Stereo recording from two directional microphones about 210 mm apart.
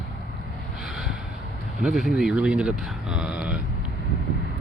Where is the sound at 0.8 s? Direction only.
Centre (ahead or behind).